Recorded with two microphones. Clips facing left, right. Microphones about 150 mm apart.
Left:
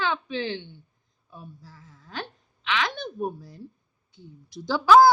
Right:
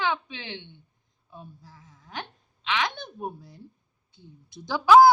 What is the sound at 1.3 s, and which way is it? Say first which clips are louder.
A woman's voice: left 1 dB; 20° right (ahead or behind).